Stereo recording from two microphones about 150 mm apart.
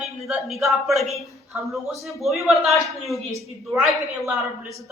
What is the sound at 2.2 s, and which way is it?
A man's voice, centre (ahead or behind).